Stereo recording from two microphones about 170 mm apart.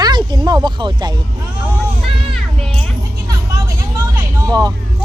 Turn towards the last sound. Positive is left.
turn(degrees=-20)  # may be behind; listen again after turning